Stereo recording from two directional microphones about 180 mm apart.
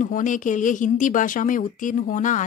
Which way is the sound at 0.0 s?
45° left (ahead or behind).